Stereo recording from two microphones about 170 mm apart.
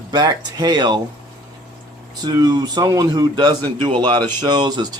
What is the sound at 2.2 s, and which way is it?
Speech, 25° right (ahead or behind).